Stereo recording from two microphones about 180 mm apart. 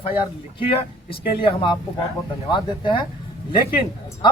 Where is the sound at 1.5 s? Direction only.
25° left (ahead or behind).